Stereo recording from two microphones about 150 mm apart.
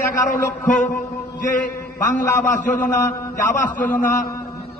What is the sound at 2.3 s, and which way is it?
A man's voice, 20° left (ahead or behind).